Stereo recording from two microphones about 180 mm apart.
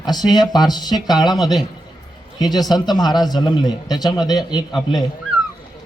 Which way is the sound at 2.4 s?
20° left (ahead or behind).